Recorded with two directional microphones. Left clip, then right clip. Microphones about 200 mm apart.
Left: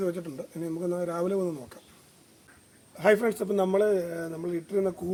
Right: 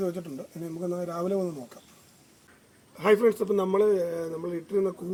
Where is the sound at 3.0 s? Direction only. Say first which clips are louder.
Right 1 dB; 15° left (ahead or behind).